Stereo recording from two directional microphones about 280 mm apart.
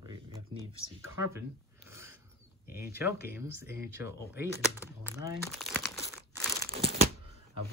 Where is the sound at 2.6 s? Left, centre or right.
Left.